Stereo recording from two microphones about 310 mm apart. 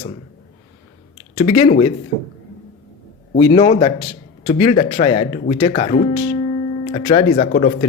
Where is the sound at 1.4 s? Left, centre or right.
Centre.